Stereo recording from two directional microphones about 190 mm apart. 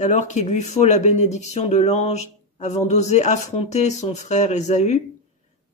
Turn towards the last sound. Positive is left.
turn(degrees=35)  # may be behind; listen again after turning